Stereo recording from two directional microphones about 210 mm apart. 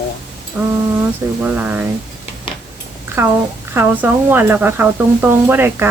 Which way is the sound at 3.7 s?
10° right (ahead or behind).